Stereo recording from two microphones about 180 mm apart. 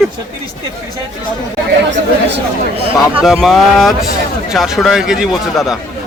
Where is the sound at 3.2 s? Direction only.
Centre (ahead or behind).